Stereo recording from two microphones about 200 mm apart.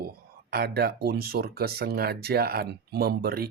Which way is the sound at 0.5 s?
50° right (ahead or behind).